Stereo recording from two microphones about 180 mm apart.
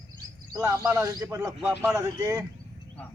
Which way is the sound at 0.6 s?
20° right (ahead or behind).